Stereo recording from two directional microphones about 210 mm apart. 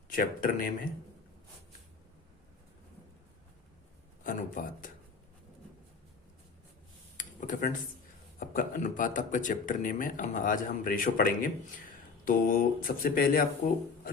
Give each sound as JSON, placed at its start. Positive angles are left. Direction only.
{"t": 0.2, "sound": "speech", "side_deg": 40}
{"t": 4.2, "sound": "speech", "side_deg": 40}
{"t": 7.2, "sound": "a sound", "side_deg": 40}
{"t": 8.4, "sound": "speech", "side_deg": 40}